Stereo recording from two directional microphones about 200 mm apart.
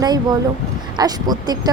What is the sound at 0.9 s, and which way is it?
Speech, 20° right (ahead or behind).